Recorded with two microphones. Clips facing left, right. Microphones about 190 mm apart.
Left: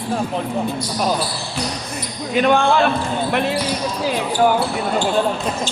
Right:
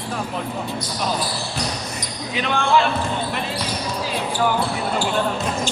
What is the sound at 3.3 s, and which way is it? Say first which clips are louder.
Speech: left 8 dB; 60° left (ahead or behind).